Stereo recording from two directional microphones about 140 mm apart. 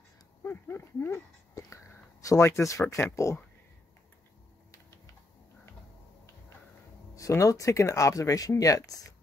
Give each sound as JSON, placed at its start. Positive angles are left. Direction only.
{"t": 0.4, "sound": "speech", "side_deg": 15}
{"t": 7.2, "sound": "speech", "side_deg": 25}